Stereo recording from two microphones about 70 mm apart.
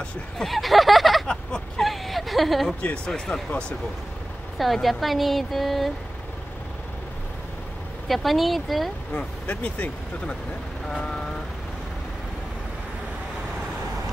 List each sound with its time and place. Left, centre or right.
0.4 s speech: centre
1.2 s a sound: centre
3.1 s speech: centre
8.1 s speech: centre
9.1 s speech: centre
10.9 s vehicle: centre